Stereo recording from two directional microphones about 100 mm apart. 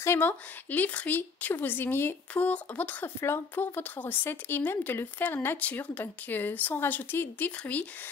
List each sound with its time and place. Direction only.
0.0 s a woman's voice: 20° left (ahead or behind)